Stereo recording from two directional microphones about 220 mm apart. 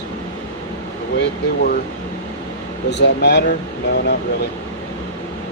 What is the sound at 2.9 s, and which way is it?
Speech, 50° left (ahead or behind).